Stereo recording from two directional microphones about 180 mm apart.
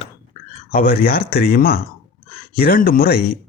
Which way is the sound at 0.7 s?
50° left (ahead or behind).